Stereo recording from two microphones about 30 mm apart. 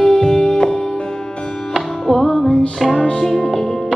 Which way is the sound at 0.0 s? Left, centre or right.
Left.